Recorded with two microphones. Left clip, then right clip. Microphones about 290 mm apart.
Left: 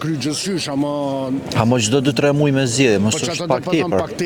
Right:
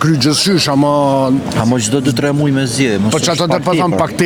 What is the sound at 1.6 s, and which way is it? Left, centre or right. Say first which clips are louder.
Speech: left 2 dB; left.